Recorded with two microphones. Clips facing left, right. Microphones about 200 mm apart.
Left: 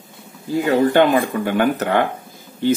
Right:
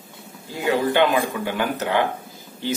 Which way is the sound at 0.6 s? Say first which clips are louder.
Left 4 dB; 50° left (ahead or behind).